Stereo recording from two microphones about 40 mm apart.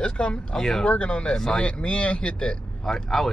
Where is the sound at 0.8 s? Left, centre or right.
Left.